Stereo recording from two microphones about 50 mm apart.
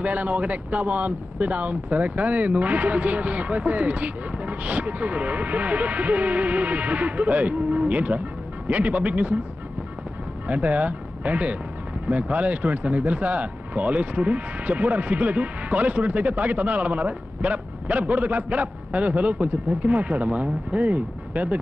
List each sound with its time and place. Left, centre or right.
0.0 s speech: right
10.4 s speech: right